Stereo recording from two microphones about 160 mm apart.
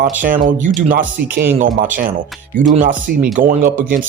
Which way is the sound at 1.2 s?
65° right (ahead or behind).